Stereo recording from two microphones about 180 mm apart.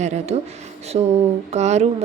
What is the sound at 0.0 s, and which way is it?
A woman's voice, 40° right (ahead or behind).